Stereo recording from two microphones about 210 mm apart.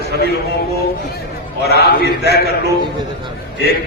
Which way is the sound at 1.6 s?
50° left (ahead or behind).